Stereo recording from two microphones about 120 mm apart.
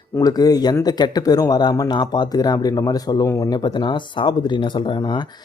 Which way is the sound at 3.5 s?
35° left (ahead or behind).